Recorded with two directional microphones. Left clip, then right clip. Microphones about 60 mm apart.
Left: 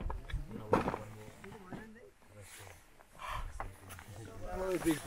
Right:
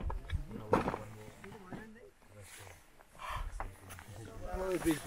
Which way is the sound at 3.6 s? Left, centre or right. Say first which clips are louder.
Even; right.